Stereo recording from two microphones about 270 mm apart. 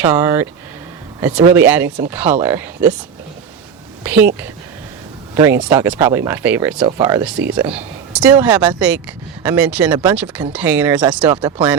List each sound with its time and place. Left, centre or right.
0.0 s speech: centre
4.0 s speech: centre
5.3 s speech: centre
11.3 s speech: centre